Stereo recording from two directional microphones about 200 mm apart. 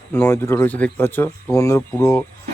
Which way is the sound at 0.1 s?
10° left (ahead or behind).